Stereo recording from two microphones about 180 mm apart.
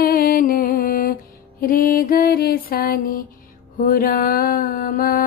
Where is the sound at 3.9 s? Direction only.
55° left (ahead or behind).